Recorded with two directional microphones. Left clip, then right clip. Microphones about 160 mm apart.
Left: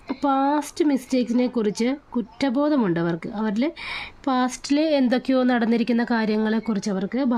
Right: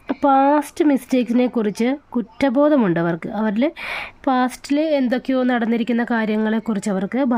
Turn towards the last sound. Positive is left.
turn(degrees=-20)  # may be behind; listen again after turning